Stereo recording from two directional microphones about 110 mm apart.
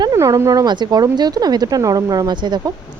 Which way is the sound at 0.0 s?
35° right (ahead or behind).